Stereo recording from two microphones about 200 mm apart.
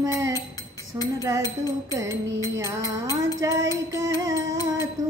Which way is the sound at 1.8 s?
15° right (ahead or behind).